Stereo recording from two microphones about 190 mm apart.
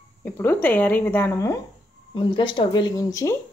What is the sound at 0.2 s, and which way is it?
Speech, 10° left (ahead or behind).